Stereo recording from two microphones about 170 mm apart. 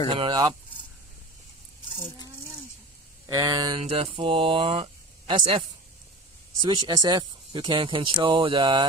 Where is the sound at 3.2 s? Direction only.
20° right (ahead or behind).